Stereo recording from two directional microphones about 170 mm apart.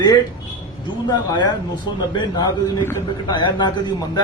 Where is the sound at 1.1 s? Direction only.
25° left (ahead or behind).